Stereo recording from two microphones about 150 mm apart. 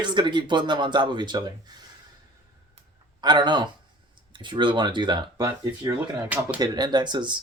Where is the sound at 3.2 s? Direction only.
30° right (ahead or behind).